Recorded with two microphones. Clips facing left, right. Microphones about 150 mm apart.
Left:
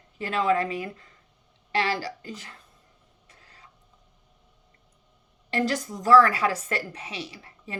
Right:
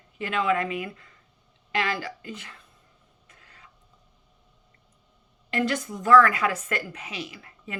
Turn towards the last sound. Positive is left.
turn(degrees=30)  # may be behind; listen again after turning